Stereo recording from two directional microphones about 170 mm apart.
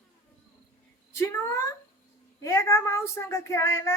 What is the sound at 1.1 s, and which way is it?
A child's voice, 15° left (ahead or behind).